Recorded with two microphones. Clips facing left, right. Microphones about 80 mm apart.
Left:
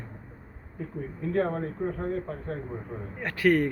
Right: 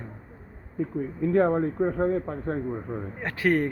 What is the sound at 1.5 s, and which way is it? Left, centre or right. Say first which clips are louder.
Speech: right 6 dB; right.